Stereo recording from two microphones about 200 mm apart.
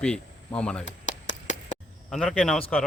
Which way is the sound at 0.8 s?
65° left (ahead or behind).